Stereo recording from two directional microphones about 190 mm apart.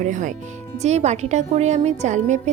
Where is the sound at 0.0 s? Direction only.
40° right (ahead or behind).